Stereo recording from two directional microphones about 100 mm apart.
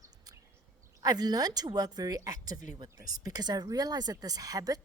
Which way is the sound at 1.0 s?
40° right (ahead or behind).